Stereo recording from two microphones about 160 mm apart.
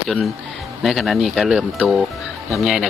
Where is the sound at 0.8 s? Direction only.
Centre (ahead or behind).